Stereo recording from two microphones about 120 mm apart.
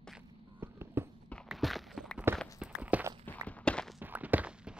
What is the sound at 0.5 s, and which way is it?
Fireworks, 20° right (ahead or behind).